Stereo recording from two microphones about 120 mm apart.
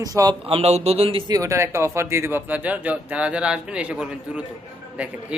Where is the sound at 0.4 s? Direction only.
55° right (ahead or behind).